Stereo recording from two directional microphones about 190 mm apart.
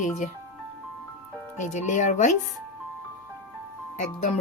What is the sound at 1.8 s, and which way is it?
Speech, 40° left (ahead or behind).